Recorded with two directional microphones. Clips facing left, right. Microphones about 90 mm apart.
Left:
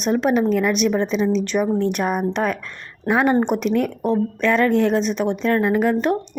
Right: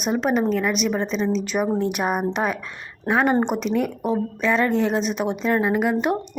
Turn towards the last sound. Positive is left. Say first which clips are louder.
# left 2 dB
turn(degrees=-5)  # may be behind; listen again after turning